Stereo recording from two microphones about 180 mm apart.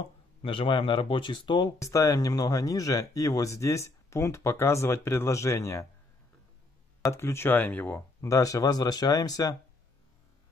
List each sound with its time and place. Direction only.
0.4 s speech: 30° left (ahead or behind)
7.1 s speech: 15° left (ahead or behind)